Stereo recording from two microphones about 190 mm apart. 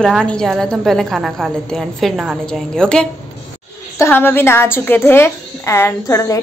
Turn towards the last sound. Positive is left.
turn(degrees=15)  # may be behind; listen again after turning